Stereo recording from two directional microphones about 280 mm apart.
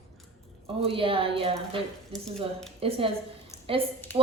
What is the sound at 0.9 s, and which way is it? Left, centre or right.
Speech, centre.